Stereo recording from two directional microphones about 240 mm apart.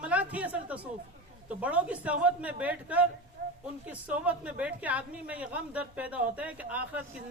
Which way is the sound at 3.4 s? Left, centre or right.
Right.